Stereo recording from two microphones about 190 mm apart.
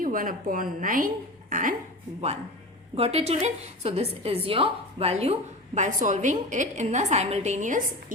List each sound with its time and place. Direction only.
0.0 s a woman's voice: 45° right (ahead or behind)
2.9 s a woman's voice: 30° right (ahead or behind)